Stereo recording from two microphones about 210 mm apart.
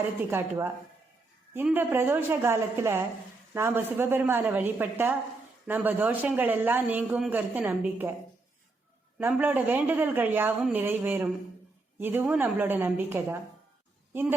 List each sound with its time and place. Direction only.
0.3 s a man's voice: 10° right (ahead or behind)
9.1 s a man's voice: 10° right (ahead or behind)